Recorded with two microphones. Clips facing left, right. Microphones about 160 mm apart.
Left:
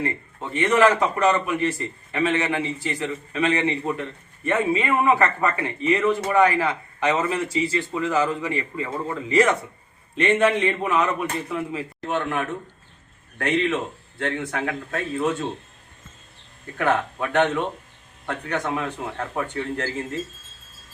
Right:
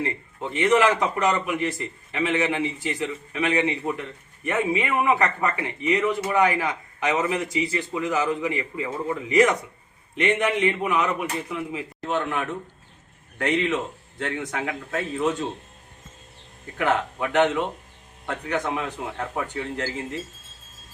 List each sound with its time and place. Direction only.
0.5 s a man's voice: 15° right (ahead or behind)
16.7 s a man's voice: 15° right (ahead or behind)